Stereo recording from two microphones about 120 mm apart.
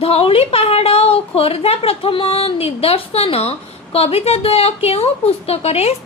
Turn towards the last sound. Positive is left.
turn(degrees=60)  # may be behind; listen again after turning